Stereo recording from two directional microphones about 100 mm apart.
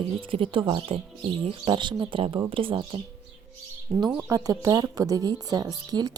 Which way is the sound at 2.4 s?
60° right (ahead or behind).